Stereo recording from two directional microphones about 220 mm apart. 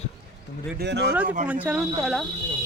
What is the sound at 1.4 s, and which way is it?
Speech, 5° right (ahead or behind).